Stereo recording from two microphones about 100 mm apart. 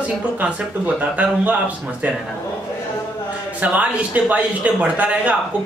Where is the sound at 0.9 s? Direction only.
15° right (ahead or behind).